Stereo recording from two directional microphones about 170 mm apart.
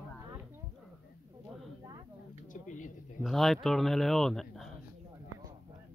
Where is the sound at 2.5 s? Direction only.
50° left (ahead or behind).